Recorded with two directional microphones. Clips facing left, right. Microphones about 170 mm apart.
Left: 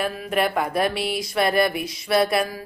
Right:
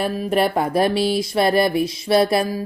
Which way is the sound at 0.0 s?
35° right (ahead or behind).